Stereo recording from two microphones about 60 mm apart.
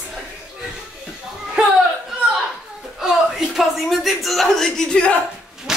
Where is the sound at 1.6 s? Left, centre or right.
Centre.